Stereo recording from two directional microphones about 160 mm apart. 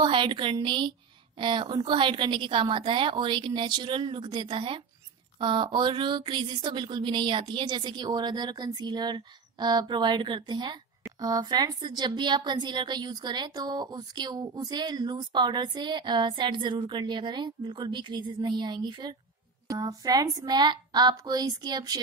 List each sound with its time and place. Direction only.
0.0 s a woman's voice: 30° right (ahead or behind)